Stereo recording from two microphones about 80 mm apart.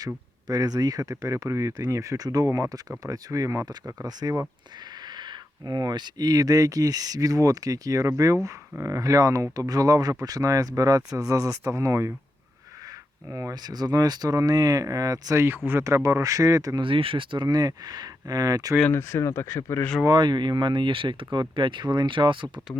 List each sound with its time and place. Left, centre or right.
0.4 s speech: right
4.0 s speech: right
5.0 s speech: right
13.2 s speech: right
15.4 s speech: right
16.0 s speech: right
16.8 s speech: right
18.9 s speech: left
20.1 s speech: right